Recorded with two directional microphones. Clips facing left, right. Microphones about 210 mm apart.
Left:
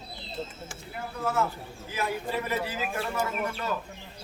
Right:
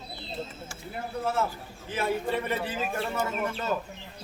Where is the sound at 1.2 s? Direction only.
30° right (ahead or behind).